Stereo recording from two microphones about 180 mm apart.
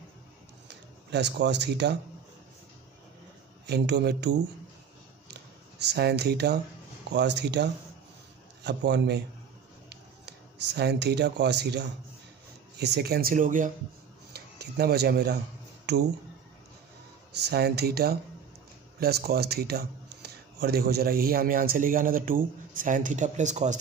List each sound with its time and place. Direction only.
1.1 s speech: 75° right (ahead or behind)
3.6 s speech: 65° right (ahead or behind)
5.9 s speech: 65° right (ahead or behind)
9.8 s a sound: 70° right (ahead or behind)
12.7 s speech: 65° right (ahead or behind); by 13.7 s 45° right (ahead or behind)
14.3 s a sound: 60° right (ahead or behind)
17.4 s speech: 65° right (ahead or behind); by 23.8 s 40° right (ahead or behind)